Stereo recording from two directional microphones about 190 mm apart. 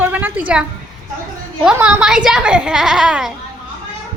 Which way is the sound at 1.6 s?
5° right (ahead or behind).